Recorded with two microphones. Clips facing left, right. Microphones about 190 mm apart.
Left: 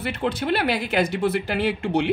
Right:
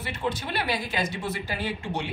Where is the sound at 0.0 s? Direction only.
65° left (ahead or behind).